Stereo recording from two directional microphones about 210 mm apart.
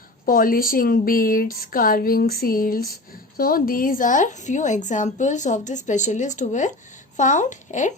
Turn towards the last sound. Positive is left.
turn(degrees=35)  # may be behind; listen again after turning